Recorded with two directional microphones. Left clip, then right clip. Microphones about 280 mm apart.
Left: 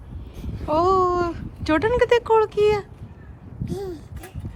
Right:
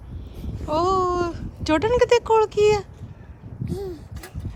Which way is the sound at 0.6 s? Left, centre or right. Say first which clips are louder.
Left 2 dB; centre.